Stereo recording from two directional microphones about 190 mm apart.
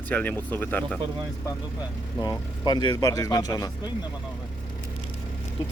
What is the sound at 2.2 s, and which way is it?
Speech, 20° left (ahead or behind).